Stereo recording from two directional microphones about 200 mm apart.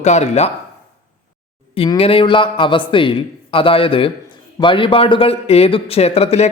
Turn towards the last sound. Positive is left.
turn(degrees=30)  # may be behind; listen again after turning